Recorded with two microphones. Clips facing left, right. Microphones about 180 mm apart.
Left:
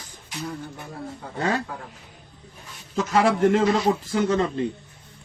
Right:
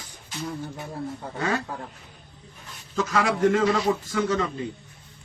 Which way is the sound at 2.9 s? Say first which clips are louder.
Left 3 dB; 30° left (ahead or behind).